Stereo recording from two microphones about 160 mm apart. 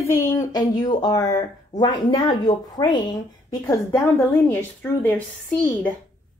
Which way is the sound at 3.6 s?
15° left (ahead or behind).